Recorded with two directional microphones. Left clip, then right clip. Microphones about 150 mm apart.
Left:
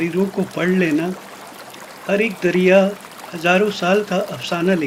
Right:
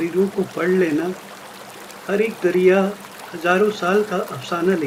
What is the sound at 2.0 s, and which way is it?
Speech, 45° left (ahead or behind).